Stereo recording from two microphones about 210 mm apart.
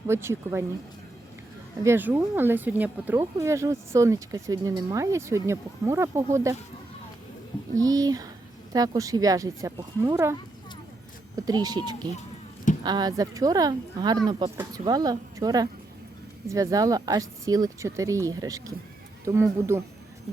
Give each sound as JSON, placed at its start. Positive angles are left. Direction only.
{"t": 0.1, "sound": "speech", "side_deg": -10}
{"t": 1.8, "sound": "speech", "side_deg": -10}
{"t": 7.8, "sound": "speech", "side_deg": -15}
{"t": 11.3, "sound": "a woman's voice", "side_deg": -15}